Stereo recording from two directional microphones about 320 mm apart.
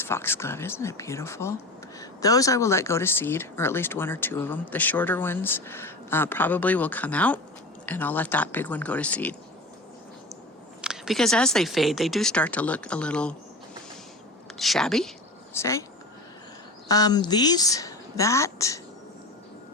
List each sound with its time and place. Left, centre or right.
0.0 s speech: centre
10.8 s speech: centre
14.6 s speech: centre
16.9 s speech: centre